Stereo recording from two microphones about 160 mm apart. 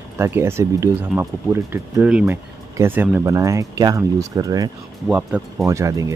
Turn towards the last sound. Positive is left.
turn(degrees=-20)  # may be behind; listen again after turning